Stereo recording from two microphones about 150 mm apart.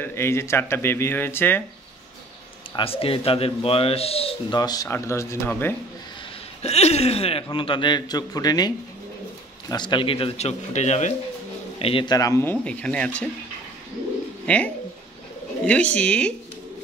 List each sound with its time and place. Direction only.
0.0 s speech: 15° left (ahead or behind)
2.7 s speech: 40° left (ahead or behind)
4.6 s a man's voice: 25° left (ahead or behind)
6.6 s a man's voice: 45° left (ahead or behind)
11.8 s speech: 35° left (ahead or behind); by 13.3 s 10° left (ahead or behind)
14.4 s speech: 10° left (ahead or behind)